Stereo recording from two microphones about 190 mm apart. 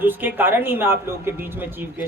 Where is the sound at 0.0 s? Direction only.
10° right (ahead or behind).